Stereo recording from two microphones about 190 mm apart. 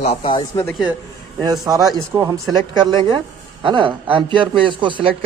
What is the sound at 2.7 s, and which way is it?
A man's voice, 25° right (ahead or behind).